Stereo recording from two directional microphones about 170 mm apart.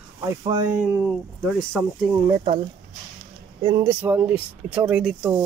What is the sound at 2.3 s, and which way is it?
Speech, 40° right (ahead or behind).